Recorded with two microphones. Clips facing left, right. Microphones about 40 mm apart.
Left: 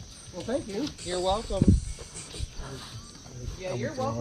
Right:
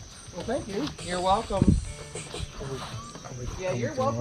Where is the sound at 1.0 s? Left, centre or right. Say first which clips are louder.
Right 4 dB; right.